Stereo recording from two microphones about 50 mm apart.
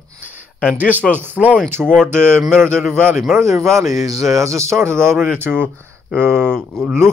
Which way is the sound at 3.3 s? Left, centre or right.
Centre.